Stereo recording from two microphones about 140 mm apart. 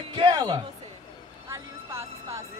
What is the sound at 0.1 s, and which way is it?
Speech, 35° right (ahead or behind).